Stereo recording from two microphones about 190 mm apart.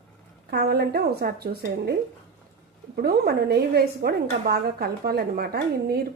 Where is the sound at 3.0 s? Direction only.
55° right (ahead or behind).